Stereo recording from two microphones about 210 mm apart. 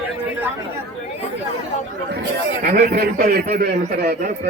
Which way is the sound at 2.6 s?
45° right (ahead or behind).